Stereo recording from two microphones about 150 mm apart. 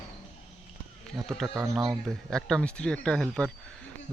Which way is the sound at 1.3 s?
Centre (ahead or behind).